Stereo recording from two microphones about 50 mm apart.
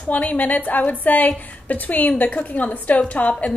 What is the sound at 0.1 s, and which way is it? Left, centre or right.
A woman's voice, left.